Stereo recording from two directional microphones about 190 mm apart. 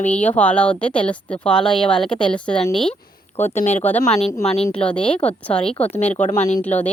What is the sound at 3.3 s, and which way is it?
Speech, 35° left (ahead or behind).